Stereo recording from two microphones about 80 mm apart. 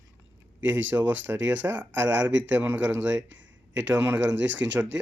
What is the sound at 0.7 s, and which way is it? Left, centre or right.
Speech, right.